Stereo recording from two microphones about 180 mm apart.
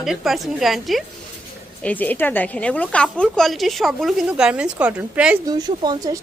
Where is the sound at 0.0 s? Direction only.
Centre (ahead or behind).